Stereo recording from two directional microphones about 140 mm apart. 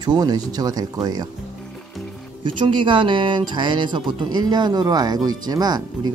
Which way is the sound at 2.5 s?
35° right (ahead or behind).